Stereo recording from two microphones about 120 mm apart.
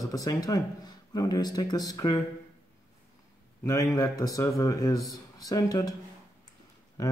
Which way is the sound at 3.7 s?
30° left (ahead or behind).